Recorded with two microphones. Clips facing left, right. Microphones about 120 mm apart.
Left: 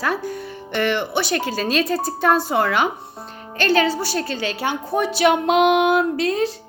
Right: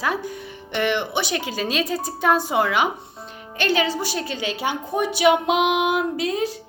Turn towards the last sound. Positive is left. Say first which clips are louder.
# left 3 dB
turn(degrees=-10)  # may be behind; listen again after turning